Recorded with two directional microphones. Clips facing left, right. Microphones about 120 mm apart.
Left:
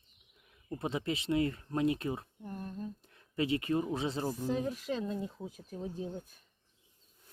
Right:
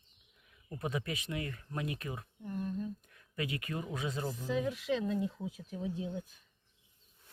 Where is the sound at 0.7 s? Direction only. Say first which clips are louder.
Left 3 dB; 25° left (ahead or behind).